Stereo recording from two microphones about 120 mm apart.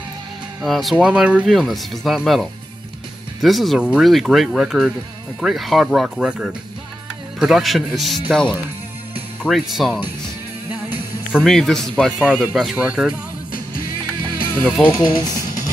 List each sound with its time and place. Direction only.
0.7 s speech: centre (ahead or behind)
10.7 s music: 15° right (ahead or behind)
11.4 s speech: 5° left (ahead or behind)
14.6 s speech: 15° left (ahead or behind)